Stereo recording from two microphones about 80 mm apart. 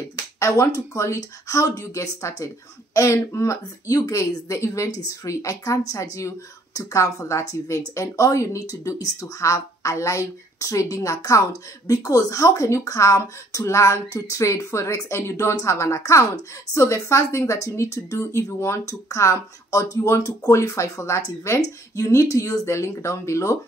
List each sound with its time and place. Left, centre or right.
0.4 s speech: left